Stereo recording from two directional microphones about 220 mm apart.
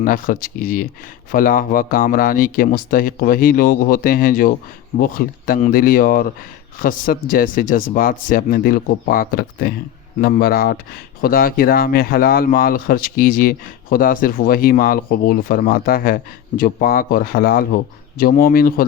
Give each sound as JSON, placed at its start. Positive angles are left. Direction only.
{"t": 0.0, "sound": "speech", "side_deg": 35}